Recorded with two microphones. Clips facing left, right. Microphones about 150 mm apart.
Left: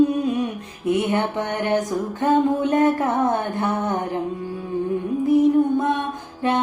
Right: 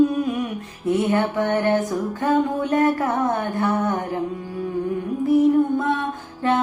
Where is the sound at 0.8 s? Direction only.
15° left (ahead or behind).